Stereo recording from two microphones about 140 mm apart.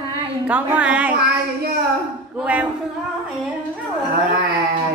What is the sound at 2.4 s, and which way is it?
Speech, 10° right (ahead or behind).